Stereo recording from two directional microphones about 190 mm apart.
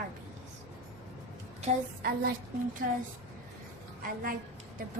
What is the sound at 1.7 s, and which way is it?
Speech, 35° right (ahead or behind).